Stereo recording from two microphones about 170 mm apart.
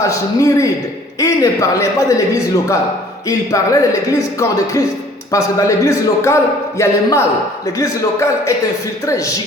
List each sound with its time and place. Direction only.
0.0 s a man's voice: 20° left (ahead or behind)